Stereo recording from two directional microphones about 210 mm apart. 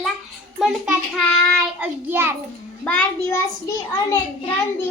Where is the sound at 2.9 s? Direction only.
5° left (ahead or behind).